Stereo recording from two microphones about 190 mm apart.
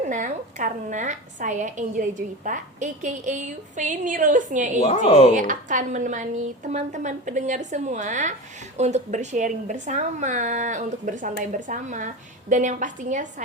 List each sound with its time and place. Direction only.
0.0 s a woman's voice: 40° right (ahead or behind)
4.8 s speech: 30° left (ahead or behind)
5.3 s a woman's voice: 40° right (ahead or behind)